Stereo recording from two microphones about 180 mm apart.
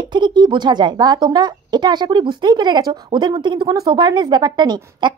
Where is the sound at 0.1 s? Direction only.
25° right (ahead or behind).